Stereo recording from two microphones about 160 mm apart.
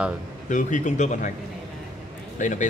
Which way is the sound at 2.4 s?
50° left (ahead or behind).